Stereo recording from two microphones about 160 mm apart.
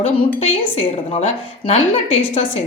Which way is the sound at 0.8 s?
40° left (ahead or behind).